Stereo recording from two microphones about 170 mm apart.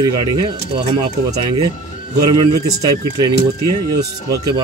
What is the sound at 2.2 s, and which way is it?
Speech, 25° right (ahead or behind).